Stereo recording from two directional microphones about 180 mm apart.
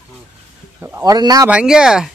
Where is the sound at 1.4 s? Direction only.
5° right (ahead or behind).